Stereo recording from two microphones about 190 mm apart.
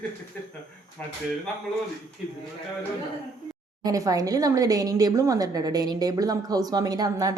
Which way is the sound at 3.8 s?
20° right (ahead or behind).